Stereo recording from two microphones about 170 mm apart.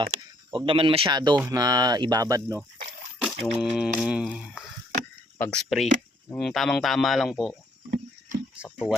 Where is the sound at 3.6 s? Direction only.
Centre (ahead or behind).